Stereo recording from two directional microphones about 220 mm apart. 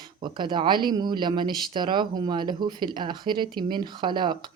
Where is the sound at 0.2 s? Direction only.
20° right (ahead or behind).